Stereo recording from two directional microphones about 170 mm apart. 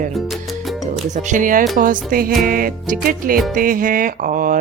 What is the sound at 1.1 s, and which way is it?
Speech, 50° right (ahead or behind).